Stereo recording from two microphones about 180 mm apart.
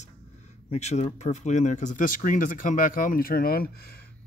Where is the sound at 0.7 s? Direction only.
40° left (ahead or behind).